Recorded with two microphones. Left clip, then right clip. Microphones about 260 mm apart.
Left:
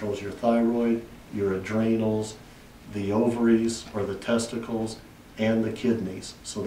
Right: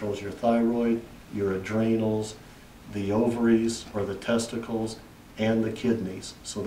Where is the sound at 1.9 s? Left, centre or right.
Left.